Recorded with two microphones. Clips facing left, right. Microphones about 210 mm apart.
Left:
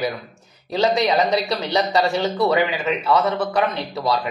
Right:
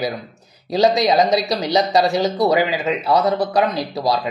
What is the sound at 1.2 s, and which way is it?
Speech, 20° right (ahead or behind).